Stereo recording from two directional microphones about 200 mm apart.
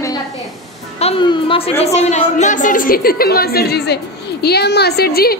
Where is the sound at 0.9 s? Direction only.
30° left (ahead or behind); by 5.4 s 50° left (ahead or behind).